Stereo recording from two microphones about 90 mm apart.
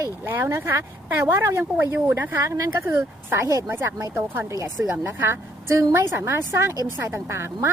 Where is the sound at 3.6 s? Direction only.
25° right (ahead or behind).